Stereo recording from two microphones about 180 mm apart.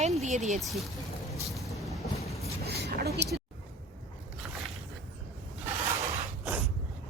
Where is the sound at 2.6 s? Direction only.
65° right (ahead or behind).